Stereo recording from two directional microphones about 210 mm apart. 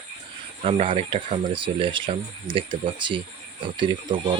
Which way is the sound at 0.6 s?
25° right (ahead or behind).